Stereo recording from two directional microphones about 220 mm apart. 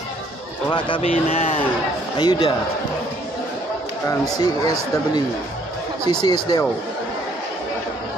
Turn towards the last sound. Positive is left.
turn(degrees=20)  # may be behind; listen again after turning